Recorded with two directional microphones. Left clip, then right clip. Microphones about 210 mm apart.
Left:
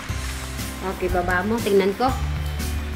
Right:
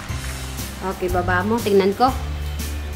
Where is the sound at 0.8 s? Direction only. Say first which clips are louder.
Right 2 dB; 5° right (ahead or behind).